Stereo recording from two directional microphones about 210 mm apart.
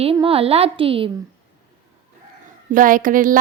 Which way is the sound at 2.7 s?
40° right (ahead or behind).